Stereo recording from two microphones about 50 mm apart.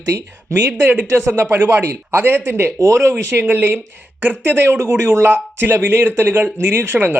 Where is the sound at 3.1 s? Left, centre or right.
Right.